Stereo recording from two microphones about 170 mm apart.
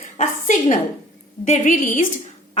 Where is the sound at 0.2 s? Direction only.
50° left (ahead or behind).